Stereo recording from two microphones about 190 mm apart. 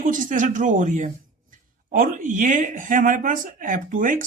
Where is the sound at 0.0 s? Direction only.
45° right (ahead or behind).